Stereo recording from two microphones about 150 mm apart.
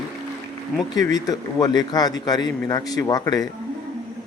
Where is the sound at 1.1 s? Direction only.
25° left (ahead or behind).